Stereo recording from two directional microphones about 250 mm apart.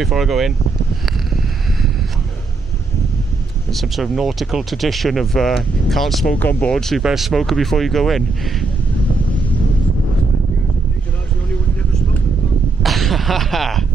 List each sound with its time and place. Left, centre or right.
0.0 s speech: centre
3.7 s speech: centre
12.8 s a sound: centre